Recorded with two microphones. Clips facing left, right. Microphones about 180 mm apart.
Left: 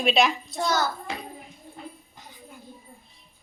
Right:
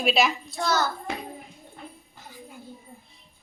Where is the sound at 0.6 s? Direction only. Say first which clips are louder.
Even; 10° left (ahead or behind).